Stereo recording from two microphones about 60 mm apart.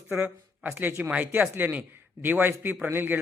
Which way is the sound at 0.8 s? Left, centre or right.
Right.